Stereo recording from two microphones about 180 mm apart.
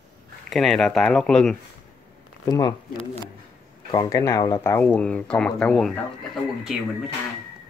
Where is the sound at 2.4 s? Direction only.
20° left (ahead or behind).